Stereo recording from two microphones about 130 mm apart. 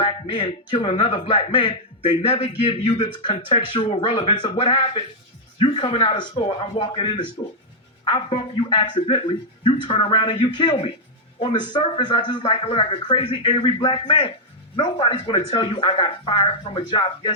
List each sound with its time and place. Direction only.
0.0 s a man's voice: 40° left (ahead or behind)